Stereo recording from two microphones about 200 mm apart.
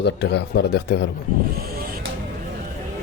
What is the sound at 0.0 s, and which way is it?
Speech, 60° left (ahead or behind).